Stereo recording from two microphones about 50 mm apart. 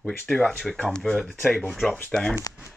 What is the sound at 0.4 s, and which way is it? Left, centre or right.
Speech, left.